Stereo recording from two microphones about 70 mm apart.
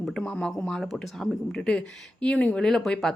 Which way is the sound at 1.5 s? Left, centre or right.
Centre.